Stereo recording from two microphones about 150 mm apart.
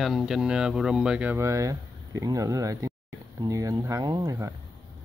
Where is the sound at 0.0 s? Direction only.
Centre (ahead or behind); by 4.5 s 25° right (ahead or behind).